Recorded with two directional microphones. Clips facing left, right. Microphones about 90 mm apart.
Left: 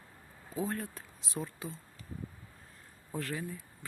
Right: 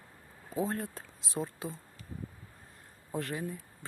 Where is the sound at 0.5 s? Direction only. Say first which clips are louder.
Right 2 dB; 30° right (ahead or behind).